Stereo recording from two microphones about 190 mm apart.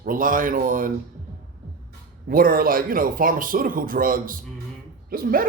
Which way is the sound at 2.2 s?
50° right (ahead or behind).